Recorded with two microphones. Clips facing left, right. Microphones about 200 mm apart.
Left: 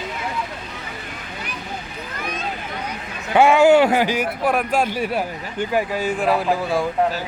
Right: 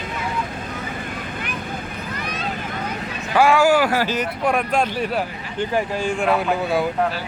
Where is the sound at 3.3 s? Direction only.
20° left (ahead or behind).